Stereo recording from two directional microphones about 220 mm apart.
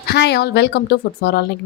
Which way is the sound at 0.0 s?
50° left (ahead or behind).